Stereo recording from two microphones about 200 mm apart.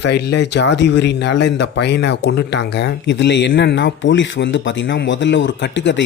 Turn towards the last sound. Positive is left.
turn(degrees=65)  # may be behind; listen again after turning